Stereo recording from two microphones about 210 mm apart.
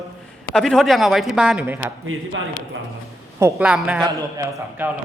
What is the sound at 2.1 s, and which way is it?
Speech, 75° right (ahead or behind).